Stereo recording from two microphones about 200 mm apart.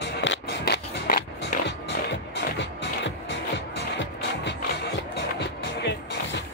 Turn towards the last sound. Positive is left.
turn(degrees=55)  # may be behind; listen again after turning